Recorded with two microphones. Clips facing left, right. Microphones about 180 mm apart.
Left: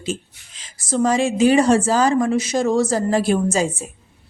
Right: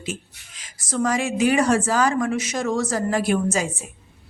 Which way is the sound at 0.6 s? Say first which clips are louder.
Left 4 dB; 30° left (ahead or behind).